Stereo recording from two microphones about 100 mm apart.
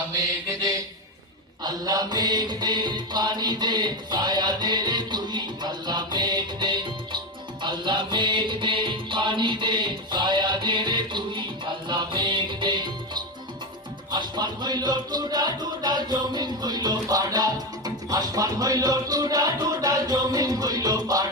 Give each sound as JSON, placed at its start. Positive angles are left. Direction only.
{"t": 1.6, "sound": "music", "side_deg": -40}
{"t": 14.1, "sound": "music", "side_deg": -45}